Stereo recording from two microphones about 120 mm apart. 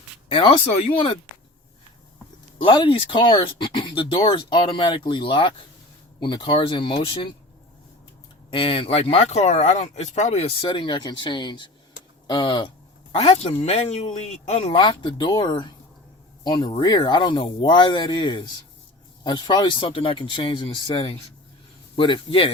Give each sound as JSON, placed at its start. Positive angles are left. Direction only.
{"t": 0.3, "sound": "speech", "side_deg": 50}
{"t": 2.6, "sound": "speech", "side_deg": 45}
{"t": 8.4, "sound": "speech", "side_deg": 50}
{"t": 13.1, "sound": "speech", "side_deg": 60}
{"t": 14.8, "sound": "speech", "side_deg": 40}